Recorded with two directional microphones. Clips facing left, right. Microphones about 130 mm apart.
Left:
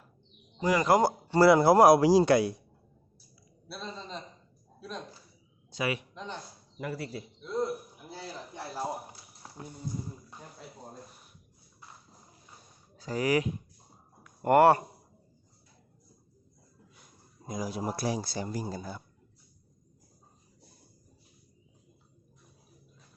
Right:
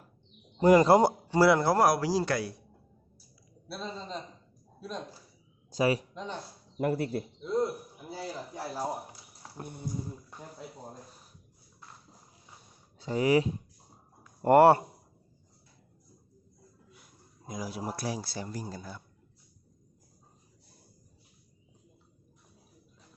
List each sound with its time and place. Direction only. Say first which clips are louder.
0.6 s a man's voice: right 7 dB; 45° right (ahead or behind)
0.9 s speech: right 2 dB; 25° right (ahead or behind)
1.3 s speech: left 3 dB; 5° right (ahead or behind)
1.5 s a man's voice: left 5 dB; 10° left (ahead or behind)
3.7 s a man's voice: right 2 dB; 5° right (ahead or behind)
5.7 s speech: right 5 dB; 35° right (ahead or behind)
6.7 s a man's voice: right 7 dB; 50° right (ahead or behind)
8.0 s speech: right 4 dB; 10° right (ahead or behind)
9.6 s a sound: right 2 dB; 60° right (ahead or behind)
13.0 s speech: right 3 dB; 25° right (ahead or behind)
16.9 s speech: right 1 dB; 5° right (ahead or behind)
18.4 s a man's voice: left 4 dB; 10° left (ahead or behind)